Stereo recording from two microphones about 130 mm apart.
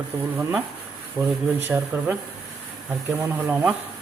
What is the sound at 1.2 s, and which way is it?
Speech, 25° right (ahead or behind).